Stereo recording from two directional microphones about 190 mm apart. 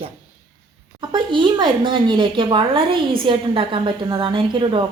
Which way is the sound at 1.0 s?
25° right (ahead or behind).